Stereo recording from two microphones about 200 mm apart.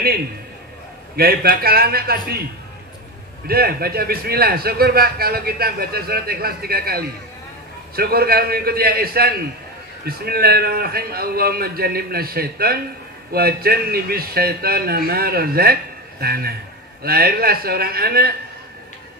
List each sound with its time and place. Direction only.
1.1 s a man's voice: 50° right (ahead or behind)
3.4 s a man's voice: 50° right (ahead or behind)